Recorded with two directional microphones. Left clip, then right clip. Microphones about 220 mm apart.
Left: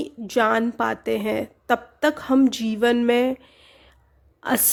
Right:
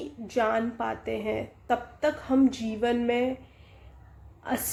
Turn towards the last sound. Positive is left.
turn(degrees=50)  # may be behind; listen again after turning